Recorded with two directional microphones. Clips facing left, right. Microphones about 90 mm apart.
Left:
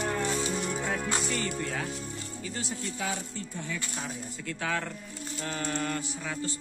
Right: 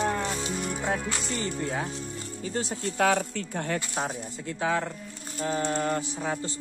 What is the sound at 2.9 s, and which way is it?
Speech, 65° right (ahead or behind).